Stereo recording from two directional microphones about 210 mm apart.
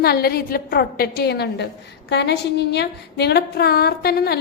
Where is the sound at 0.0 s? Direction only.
50° left (ahead or behind).